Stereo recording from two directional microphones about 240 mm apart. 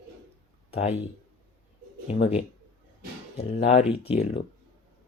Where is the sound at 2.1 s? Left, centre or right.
Left.